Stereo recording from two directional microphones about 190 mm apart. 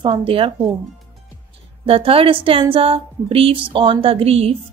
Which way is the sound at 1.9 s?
30° right (ahead or behind).